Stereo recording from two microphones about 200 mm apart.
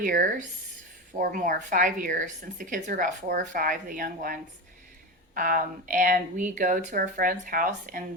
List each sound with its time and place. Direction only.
0.0 s a woman's voice: 40° right (ahead or behind)